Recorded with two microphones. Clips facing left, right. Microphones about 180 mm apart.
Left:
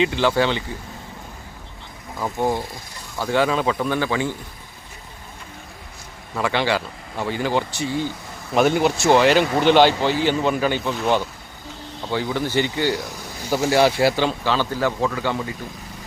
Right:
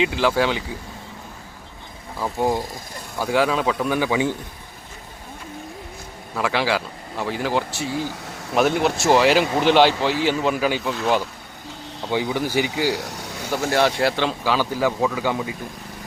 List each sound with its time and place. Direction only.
0.0 s speech: 5° right (ahead or behind)
2.1 s speech: 10° right (ahead or behind)
3.2 s speech: 5° right (ahead or behind)
6.3 s speech: centre (ahead or behind)
12.0 s speech: 15° right (ahead or behind)
13.1 s a sound: 75° right (ahead or behind)
13.5 s speech: 5° left (ahead or behind); by 15.5 s 10° right (ahead or behind)